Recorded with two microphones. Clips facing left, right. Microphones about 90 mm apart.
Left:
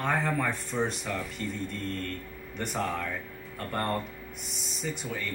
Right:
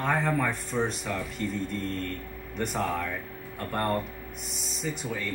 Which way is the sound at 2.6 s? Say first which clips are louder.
Right 2 dB; centre (ahead or behind).